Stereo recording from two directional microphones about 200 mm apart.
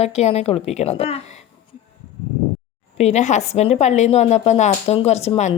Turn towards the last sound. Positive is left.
turn(degrees=30)  # may be behind; listen again after turning